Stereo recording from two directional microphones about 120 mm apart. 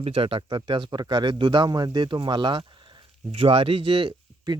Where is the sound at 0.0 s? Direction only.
50° right (ahead or behind).